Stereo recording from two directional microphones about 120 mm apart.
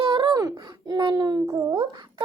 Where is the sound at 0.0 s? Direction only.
40° right (ahead or behind).